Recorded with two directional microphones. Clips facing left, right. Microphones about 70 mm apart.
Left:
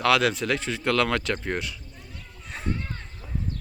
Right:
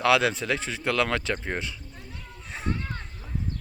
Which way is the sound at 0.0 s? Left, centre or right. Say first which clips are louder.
Even; centre.